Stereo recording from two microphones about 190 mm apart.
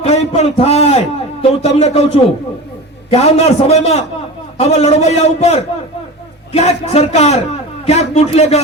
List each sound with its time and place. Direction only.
0.0 s a man's voice: 35° left (ahead or behind)